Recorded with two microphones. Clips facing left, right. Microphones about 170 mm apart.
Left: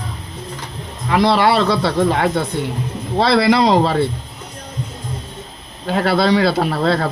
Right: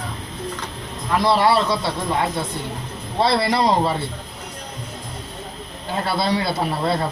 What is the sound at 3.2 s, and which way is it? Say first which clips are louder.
Speech: left 5 dB; 90° left.